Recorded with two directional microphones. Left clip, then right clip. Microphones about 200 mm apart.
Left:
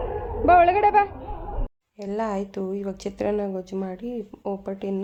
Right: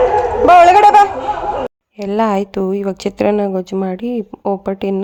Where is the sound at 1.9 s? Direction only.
40° right (ahead or behind).